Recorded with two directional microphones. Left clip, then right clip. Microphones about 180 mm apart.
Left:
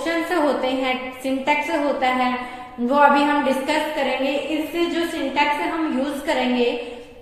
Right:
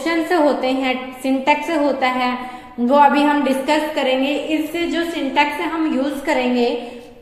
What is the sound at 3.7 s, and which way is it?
Speech, 45° right (ahead or behind).